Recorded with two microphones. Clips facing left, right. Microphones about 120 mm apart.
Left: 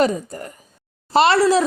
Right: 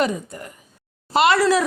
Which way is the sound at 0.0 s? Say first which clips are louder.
Left 4 dB; 35° left (ahead or behind).